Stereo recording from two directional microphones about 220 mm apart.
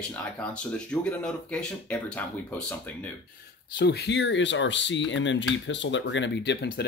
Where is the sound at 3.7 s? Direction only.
50° left (ahead or behind).